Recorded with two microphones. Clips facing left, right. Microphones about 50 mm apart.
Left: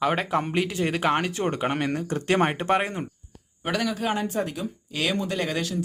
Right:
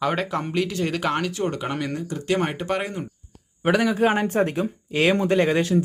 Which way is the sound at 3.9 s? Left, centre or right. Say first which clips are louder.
Right 6 dB; right.